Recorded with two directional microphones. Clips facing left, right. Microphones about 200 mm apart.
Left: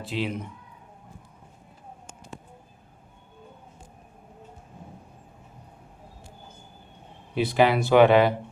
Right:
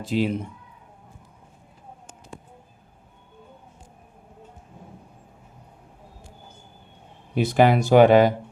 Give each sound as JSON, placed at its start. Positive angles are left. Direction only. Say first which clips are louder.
{"t": 0.0, "sound": "speech", "louder": "right 6 dB", "side_deg": -40}
{"t": 7.3, "sound": "speech", "louder": "right 3 dB", "side_deg": -45}